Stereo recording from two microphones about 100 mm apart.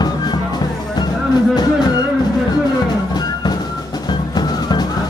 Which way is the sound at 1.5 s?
45° left (ahead or behind).